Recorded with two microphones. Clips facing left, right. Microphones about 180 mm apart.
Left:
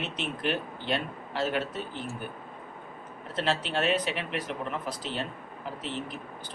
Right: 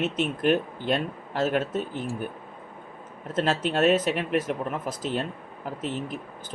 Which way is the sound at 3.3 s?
45° right (ahead or behind).